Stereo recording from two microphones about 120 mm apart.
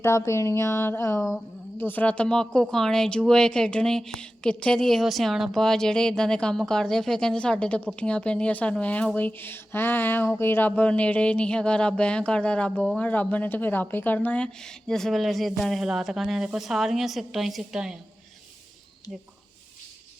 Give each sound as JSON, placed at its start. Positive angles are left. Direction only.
{"t": 0.0, "sound": "a woman's voice", "side_deg": 25}